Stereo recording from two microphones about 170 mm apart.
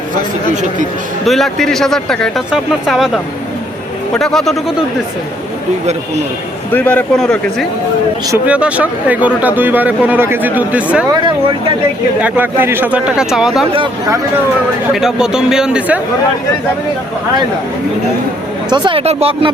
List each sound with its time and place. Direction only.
1.3 s speech: centre (ahead or behind)
4.1 s speech: centre (ahead or behind)
6.7 s a man's voice: 10° left (ahead or behind)
8.4 s speech: 5° right (ahead or behind)
12.2 s speech: 10° right (ahead or behind)
14.9 s speech: 5° right (ahead or behind)
18.7 s speech: 30° right (ahead or behind)